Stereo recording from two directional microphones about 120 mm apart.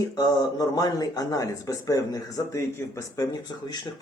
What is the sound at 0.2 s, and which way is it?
Speech, 30° left (ahead or behind).